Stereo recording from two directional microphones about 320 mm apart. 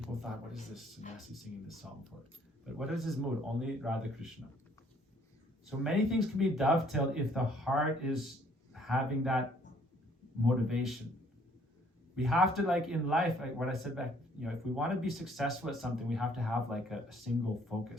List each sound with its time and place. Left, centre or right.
1.0 s speech: left
2.7 s speech: centre
5.8 s speech: centre
10.4 s speech: centre
12.1 s speech: centre